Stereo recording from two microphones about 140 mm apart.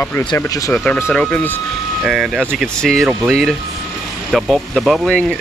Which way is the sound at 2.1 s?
Centre (ahead or behind).